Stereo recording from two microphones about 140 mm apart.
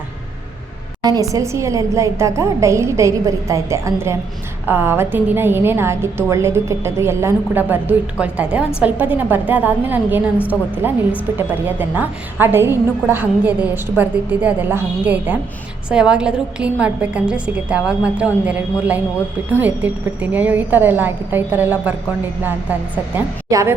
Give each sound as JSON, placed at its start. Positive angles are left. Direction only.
{"t": 1.0, "sound": "a woman's voice", "side_deg": -25}
{"t": 23.1, "sound": "a woman's voice", "side_deg": -20}